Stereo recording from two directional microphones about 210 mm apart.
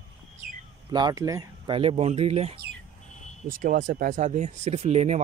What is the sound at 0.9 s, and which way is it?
Speech, 20° right (ahead or behind).